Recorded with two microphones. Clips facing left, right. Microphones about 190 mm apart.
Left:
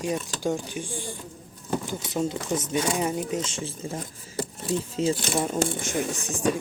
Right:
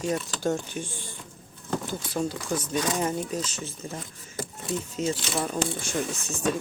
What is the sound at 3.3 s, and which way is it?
Speech, 25° left (ahead or behind).